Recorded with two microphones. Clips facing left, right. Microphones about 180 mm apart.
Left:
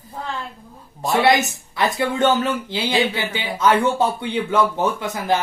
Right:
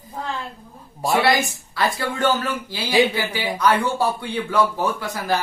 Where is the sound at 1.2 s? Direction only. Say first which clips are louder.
Left 3 dB; 20° left (ahead or behind).